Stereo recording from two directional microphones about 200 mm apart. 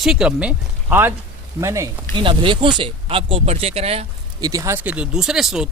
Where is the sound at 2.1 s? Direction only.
25° right (ahead or behind).